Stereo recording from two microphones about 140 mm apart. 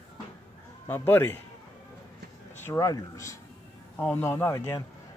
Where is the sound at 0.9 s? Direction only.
15° left (ahead or behind).